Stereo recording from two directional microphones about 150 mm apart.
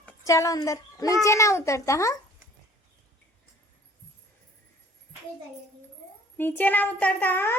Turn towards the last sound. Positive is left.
turn(degrees=15)  # may be behind; listen again after turning